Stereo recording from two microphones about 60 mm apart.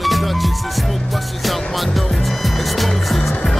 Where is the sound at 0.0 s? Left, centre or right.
Centre.